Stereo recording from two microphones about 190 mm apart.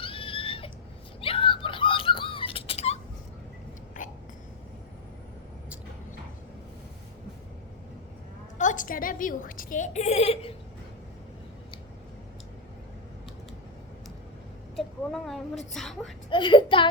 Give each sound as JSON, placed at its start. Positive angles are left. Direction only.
{"t": 0.0, "sound": "a sound", "side_deg": 30}
{"t": 4.0, "sound": "hiccup", "side_deg": 40}
{"t": 8.5, "sound": "a woman's voice", "side_deg": 40}
{"t": 14.8, "sound": "a sound", "side_deg": 0}
{"t": 15.7, "sound": "a woman's voice", "side_deg": 0}
{"t": 16.3, "sound": "a child's voice", "side_deg": 25}